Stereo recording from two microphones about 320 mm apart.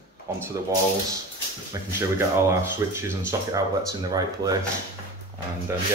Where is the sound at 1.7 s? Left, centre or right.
Centre.